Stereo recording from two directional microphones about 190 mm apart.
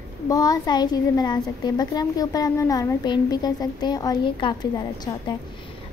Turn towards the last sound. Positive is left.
turn(degrees=20)  # may be behind; listen again after turning